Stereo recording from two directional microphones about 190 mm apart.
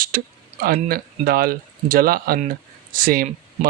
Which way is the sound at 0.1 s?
50° right (ahead or behind).